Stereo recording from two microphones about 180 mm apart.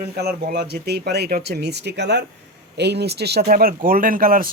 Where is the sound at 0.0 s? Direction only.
60° right (ahead or behind).